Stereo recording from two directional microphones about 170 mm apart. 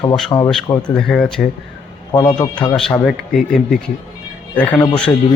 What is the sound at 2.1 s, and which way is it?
Speech, 25° left (ahead or behind).